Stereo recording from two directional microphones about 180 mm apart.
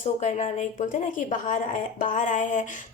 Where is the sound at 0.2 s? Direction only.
40° left (ahead or behind).